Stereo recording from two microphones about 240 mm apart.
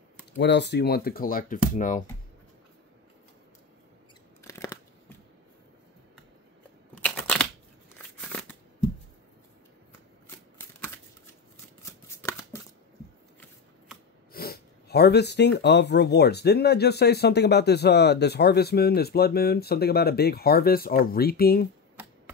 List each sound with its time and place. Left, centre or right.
0.4 s speech: left
4.5 s crunch: centre
7.0 s shuffling cards: centre
11.5 s scissors: centre
14.3 s speech: left
22.0 s a sound: centre